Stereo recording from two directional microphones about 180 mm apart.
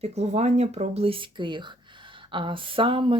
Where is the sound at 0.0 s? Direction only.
40° right (ahead or behind).